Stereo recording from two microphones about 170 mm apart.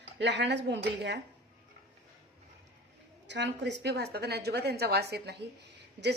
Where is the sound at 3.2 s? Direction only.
90° right.